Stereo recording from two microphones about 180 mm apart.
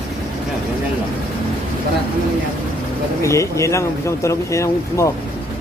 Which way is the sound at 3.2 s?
15° left (ahead or behind).